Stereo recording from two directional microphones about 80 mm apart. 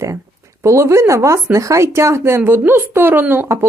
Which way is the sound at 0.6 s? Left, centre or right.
Right.